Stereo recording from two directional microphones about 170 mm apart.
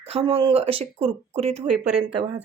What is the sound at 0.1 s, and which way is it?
Speech, 35° right (ahead or behind).